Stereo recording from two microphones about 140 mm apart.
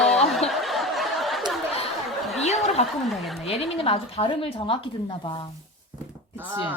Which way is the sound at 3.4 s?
45° left (ahead or behind).